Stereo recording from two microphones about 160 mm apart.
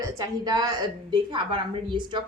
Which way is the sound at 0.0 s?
20° right (ahead or behind).